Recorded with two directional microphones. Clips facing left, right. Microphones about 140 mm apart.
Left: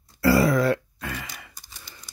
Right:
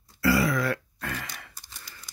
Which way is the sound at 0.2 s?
35° left (ahead or behind).